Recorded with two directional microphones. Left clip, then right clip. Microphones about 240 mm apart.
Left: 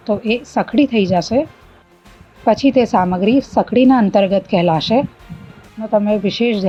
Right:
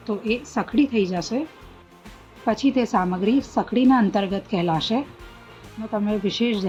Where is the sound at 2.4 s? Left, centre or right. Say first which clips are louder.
Left 9 dB; left.